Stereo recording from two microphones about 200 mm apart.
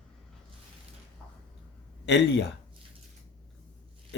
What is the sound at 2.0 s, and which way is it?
Speech, 60° left (ahead or behind).